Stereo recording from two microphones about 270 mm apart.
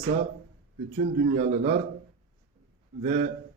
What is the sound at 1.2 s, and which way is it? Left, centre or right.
Speech, right.